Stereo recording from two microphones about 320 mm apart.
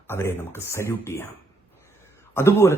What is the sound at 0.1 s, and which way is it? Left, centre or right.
A man's voice, centre.